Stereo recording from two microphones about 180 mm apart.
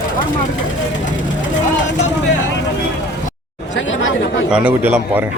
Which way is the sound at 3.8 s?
90° left.